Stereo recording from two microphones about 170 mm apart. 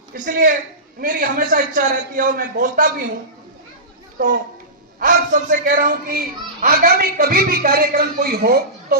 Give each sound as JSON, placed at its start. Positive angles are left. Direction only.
{"t": 0.1, "sound": "a man's voice", "side_deg": -50}
{"t": 4.9, "sound": "a child's voice", "side_deg": -55}